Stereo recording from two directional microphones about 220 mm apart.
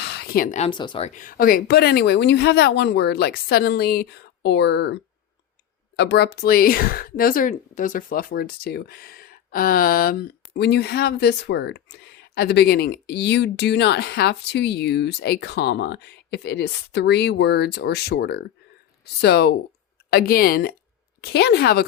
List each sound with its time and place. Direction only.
0.0 s speech: 45° left (ahead or behind)
6.0 s speech: 50° left (ahead or behind)